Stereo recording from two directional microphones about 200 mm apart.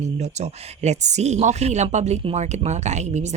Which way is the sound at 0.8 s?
35° right (ahead or behind).